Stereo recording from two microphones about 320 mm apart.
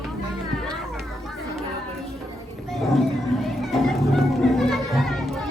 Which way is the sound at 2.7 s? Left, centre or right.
Centre.